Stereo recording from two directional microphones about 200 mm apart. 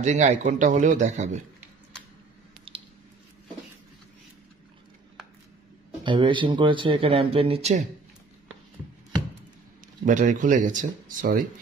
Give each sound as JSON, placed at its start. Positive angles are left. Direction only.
{"t": 0.0, "sound": "a man's voice", "side_deg": -35}
{"t": 6.0, "sound": "speech", "side_deg": -25}
{"t": 10.0, "sound": "a man's voice", "side_deg": -40}